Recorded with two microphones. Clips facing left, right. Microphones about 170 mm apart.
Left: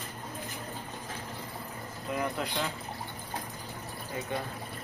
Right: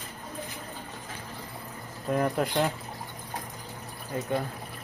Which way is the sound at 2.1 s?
45° right (ahead or behind).